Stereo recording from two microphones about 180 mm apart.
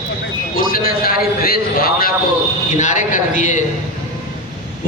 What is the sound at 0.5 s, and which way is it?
A man's voice, 50° left (ahead or behind).